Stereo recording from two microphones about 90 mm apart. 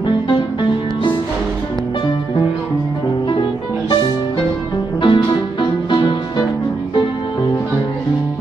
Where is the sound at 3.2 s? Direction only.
55° left (ahead or behind).